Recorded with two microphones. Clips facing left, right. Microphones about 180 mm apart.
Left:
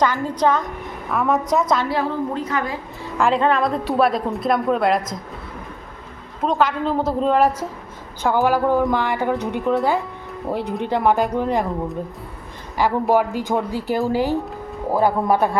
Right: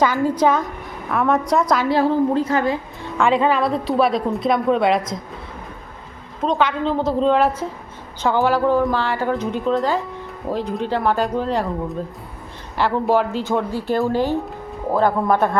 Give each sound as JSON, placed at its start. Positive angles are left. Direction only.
{"t": 0.0, "sound": "a woman's voice", "side_deg": -10}
{"t": 1.1, "sound": "a woman's voice", "side_deg": 0}
{"t": 1.9, "sound": "a woman's voice", "side_deg": -30}
{"t": 3.2, "sound": "a woman's voice", "side_deg": 0}
{"t": 6.4, "sound": "a woman's voice", "side_deg": 5}
{"t": 12.7, "sound": "a woman's voice", "side_deg": 10}